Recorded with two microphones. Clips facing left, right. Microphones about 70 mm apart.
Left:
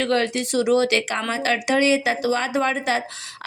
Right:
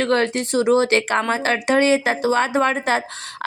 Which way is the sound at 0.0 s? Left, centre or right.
Right.